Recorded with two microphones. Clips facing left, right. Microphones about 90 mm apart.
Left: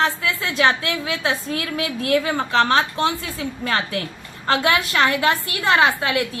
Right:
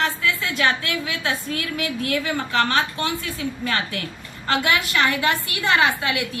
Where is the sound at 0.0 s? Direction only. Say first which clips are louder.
Left 2 dB; 30° left (ahead or behind).